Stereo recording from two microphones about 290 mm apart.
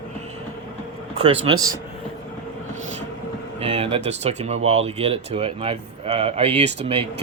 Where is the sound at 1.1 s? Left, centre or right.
Centre.